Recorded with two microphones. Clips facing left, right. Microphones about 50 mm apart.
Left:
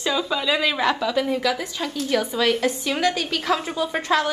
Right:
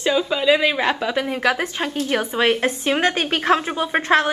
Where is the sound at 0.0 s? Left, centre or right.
Right.